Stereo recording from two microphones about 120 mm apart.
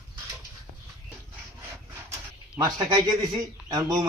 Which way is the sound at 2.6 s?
35° right (ahead or behind).